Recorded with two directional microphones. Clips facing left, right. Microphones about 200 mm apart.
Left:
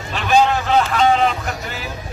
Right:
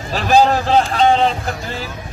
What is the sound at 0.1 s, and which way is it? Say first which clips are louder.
Speech: right 3 dB; 35° right (ahead or behind).